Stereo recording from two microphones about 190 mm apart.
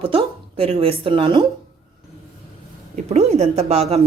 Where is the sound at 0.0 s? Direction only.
30° right (ahead or behind).